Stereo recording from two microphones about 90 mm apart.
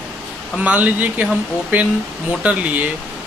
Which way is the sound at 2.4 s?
15° right (ahead or behind).